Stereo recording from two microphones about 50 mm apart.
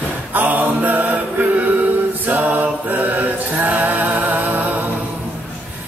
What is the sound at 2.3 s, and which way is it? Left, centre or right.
Music, right.